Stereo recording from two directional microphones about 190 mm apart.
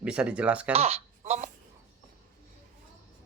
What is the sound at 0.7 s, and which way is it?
Speech, 30° right (ahead or behind).